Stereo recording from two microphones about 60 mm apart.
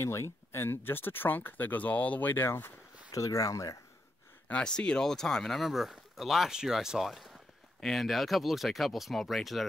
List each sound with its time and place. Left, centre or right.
0.0 s speech: left
2.4 s speech: left
3.2 s speech: left
4.5 s speech: centre